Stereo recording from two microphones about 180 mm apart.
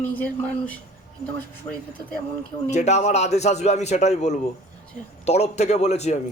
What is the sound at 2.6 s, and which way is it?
A man's voice, 40° left (ahead or behind).